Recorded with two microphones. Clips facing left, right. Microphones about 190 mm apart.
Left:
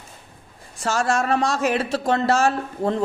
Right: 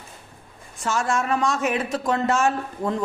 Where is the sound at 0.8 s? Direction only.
35° left (ahead or behind).